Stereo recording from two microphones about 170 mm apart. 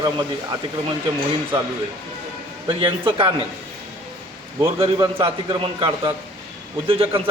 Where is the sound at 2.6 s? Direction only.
30° right (ahead or behind).